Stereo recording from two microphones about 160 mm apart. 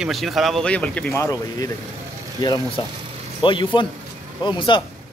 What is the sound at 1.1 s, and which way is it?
A man's voice, 20° left (ahead or behind).